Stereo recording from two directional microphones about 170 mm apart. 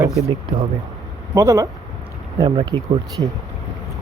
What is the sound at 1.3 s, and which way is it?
Speech, 20° right (ahead or behind).